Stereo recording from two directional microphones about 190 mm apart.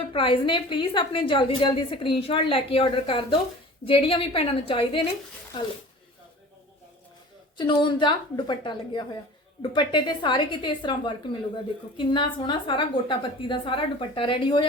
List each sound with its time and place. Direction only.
0.1 s a woman's voice: 25° left (ahead or behind)
7.5 s a woman's voice: 25° left (ahead or behind)